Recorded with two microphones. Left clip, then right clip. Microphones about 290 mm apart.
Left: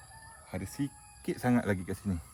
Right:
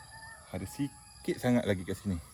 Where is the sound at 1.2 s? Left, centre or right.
Centre.